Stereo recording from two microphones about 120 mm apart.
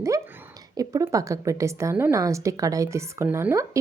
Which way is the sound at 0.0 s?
20° right (ahead or behind).